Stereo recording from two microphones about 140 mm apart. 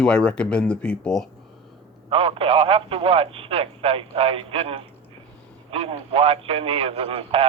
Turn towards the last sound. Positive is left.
turn(degrees=-40)  # may be behind; listen again after turning